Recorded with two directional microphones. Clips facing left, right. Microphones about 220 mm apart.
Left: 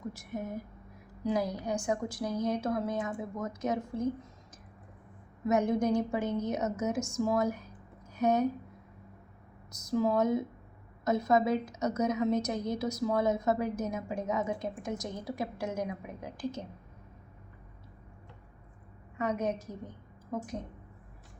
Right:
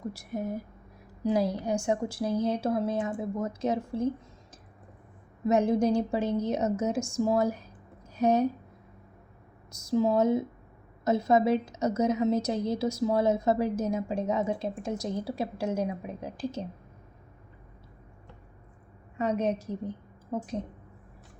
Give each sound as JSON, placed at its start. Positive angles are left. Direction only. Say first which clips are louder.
{"t": 0.1, "sound": "a woman's voice", "louder": "right 4 dB", "side_deg": -35}
{"t": 5.5, "sound": "a woman's voice", "louder": "right 3 dB", "side_deg": -30}
{"t": 9.9, "sound": "a woman's voice", "louder": "right 3 dB", "side_deg": -25}
{"t": 19.2, "sound": "a woman's voice", "louder": "right 4 dB", "side_deg": -30}